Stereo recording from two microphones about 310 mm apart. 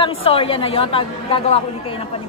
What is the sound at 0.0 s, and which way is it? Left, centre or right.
A woman's voice, centre.